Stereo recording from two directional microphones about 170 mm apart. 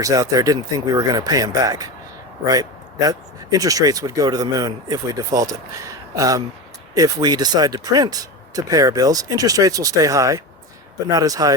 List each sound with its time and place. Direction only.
0.0 s speech: 20° right (ahead or behind)